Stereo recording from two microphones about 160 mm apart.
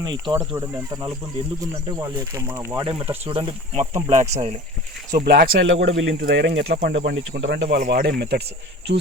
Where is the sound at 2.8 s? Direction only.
35° right (ahead or behind).